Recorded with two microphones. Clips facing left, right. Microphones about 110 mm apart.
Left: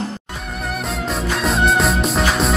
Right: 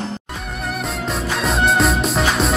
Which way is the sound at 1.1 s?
Centre (ahead or behind).